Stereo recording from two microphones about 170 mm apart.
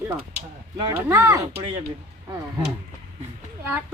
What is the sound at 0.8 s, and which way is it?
Speech, 20° right (ahead or behind).